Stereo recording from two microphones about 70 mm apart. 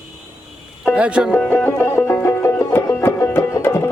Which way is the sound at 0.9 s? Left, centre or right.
Centre.